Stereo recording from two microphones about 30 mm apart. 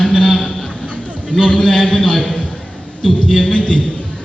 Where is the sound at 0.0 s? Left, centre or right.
Centre.